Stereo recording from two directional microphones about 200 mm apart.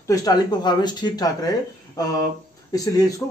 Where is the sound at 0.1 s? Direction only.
20° left (ahead or behind).